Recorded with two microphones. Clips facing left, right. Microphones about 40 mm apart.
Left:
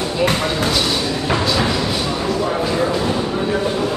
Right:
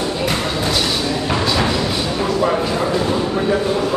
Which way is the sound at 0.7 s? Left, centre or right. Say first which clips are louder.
Even; centre.